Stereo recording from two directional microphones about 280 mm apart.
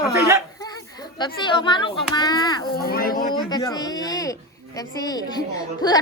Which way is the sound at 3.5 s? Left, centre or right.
Centre.